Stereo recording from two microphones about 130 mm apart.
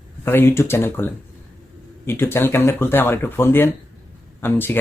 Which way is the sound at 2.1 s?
20° left (ahead or behind).